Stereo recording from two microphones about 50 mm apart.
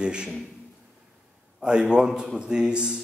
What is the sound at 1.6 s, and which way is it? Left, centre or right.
A man's voice, centre.